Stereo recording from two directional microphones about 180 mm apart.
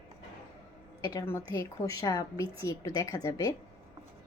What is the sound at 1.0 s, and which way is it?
A woman's voice, 15° left (ahead or behind).